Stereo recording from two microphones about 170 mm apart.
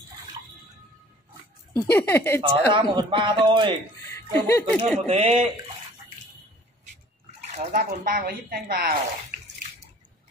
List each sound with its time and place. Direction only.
1.9 s speech: 15° left (ahead or behind)
2.4 s speech: 25° right (ahead or behind)
4.3 s speech: 15° left (ahead or behind)
5.0 s speech: 35° right (ahead or behind)
7.2 s speech: 50° right (ahead or behind)